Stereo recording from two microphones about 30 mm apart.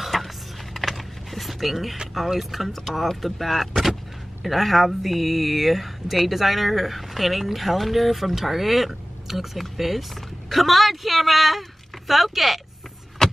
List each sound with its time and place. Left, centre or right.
0.0 s a sound: centre
0.7 s typing: centre
2.1 s speech: centre
13.2 s vehicle: centre